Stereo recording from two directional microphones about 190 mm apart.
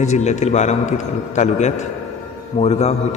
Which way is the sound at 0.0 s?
35° left (ahead or behind).